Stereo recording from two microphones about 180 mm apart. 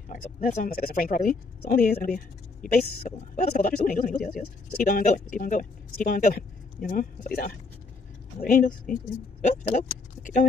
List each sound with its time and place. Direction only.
0.1 s speech: 50° left (ahead or behind)